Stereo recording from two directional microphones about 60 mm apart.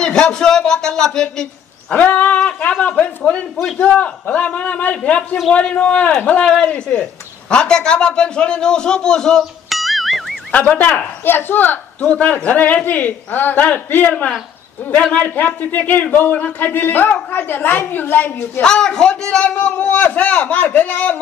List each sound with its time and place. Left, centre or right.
0.0 s speech: centre
2.0 s speech: left
9.7 s music: centre
10.5 s speech: left
11.2 s a woman's voice: left
15.1 s a woman's voice: left
18.6 s speech: centre
19.6 s speech: left